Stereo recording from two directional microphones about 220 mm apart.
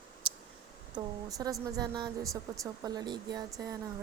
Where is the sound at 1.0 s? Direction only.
15° right (ahead or behind).